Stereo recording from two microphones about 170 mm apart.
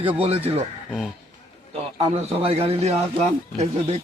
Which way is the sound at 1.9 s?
35° right (ahead or behind).